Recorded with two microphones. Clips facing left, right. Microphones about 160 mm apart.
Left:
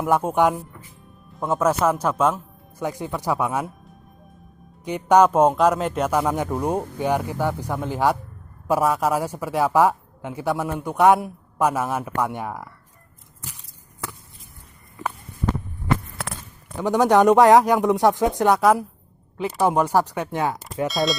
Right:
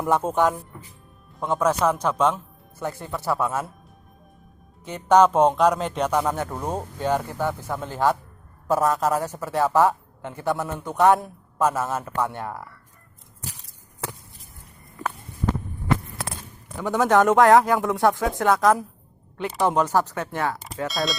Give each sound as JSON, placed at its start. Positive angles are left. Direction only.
{"t": 0.0, "sound": "a man's voice", "side_deg": 10}
{"t": 4.9, "sound": "a man's voice", "side_deg": 10}
{"t": 16.8, "sound": "a man's voice", "side_deg": 15}
{"t": 20.8, "sound": "speech", "side_deg": 0}